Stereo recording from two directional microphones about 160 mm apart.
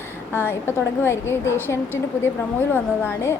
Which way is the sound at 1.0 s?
15° left (ahead or behind).